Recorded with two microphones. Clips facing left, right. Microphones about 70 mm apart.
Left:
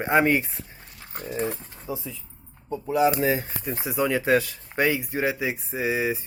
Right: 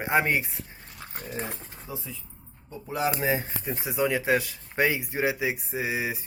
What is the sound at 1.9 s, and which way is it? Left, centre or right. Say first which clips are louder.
Speech: left 6 dB; centre.